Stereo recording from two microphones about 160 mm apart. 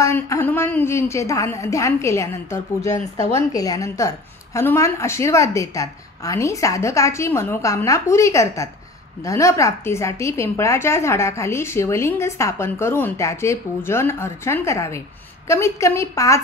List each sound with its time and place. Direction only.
0.0 s a woman's voice: 15° left (ahead or behind)